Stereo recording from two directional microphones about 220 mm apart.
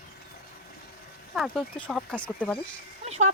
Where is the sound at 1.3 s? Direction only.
Centre (ahead or behind).